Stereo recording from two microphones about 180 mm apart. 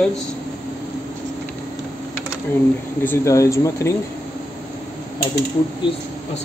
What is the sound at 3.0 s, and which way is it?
Speech, 15° left (ahead or behind).